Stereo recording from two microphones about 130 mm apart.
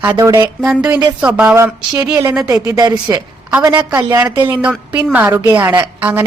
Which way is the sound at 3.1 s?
20° right (ahead or behind).